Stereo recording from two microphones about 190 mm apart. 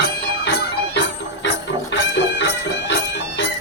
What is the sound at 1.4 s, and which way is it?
Music, 65° left (ahead or behind).